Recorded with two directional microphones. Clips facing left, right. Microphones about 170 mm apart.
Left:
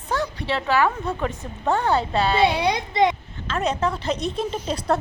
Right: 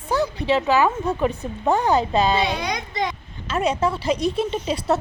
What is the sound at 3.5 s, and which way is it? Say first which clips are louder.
A woman's voice: right 2 dB; 10° right (ahead or behind).